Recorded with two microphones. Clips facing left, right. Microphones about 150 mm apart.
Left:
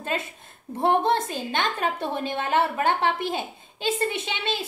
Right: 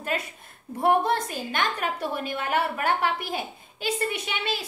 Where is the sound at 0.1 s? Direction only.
25° left (ahead or behind).